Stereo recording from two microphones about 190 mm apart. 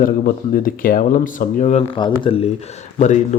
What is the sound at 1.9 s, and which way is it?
Speech, 25° left (ahead or behind).